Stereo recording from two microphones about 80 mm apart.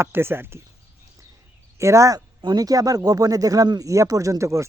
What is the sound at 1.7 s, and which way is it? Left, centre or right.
Speech, right.